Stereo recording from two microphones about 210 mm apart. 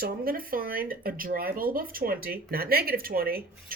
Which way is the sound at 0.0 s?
45° right (ahead or behind).